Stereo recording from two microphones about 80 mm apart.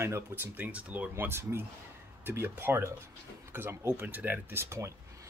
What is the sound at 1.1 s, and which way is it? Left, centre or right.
Speech, right.